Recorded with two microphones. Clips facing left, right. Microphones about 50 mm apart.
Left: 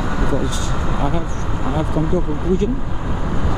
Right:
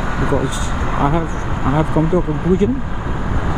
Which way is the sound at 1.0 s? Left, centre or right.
Right.